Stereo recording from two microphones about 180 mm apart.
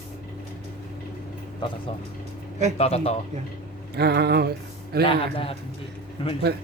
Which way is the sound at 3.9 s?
65° right (ahead or behind).